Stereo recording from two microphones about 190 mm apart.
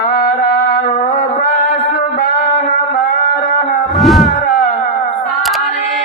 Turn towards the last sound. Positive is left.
turn(degrees=0)  # may be behind; listen again after turning